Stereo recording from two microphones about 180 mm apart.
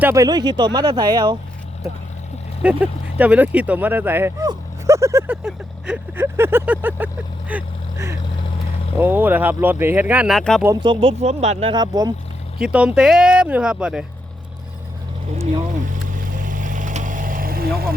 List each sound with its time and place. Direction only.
0.0 s speech: 15° right (ahead or behind)
2.6 s speech: 10° right (ahead or behind)
10.8 s speech: 25° right (ahead or behind)
11.2 s speech: 40° right (ahead or behind); by 12.1 s 20° right (ahead or behind)
12.5 s speech: 5° right (ahead or behind)
16.1 s vehicle: 45° right (ahead or behind)